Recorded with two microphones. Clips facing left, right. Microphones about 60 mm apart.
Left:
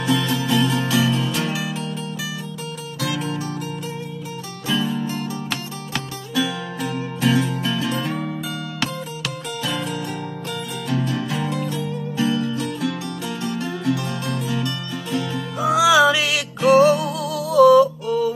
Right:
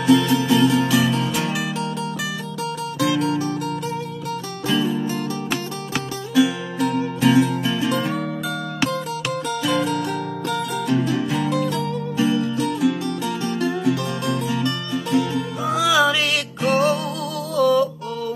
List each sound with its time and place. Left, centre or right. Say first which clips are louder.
0.0 s music: right 5 dB; centre
3.2 s music: right 5 dB; centre
4.6 s music: right 2 dB; centre
5.5 s music: right 3 dB; centre
6.8 s music: right 5 dB; centre
9.6 s music: right 4 dB; centre
12.2 s music: right 1 dB; right
12.5 s music: right 4 dB; centre
15.6 s music: left 4 dB; centre